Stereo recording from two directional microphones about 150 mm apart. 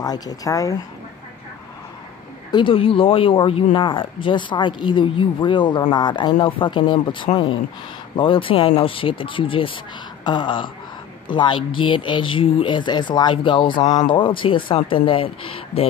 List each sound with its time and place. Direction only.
0.0 s speech: 25° left (ahead or behind)
2.5 s speech: 35° left (ahead or behind)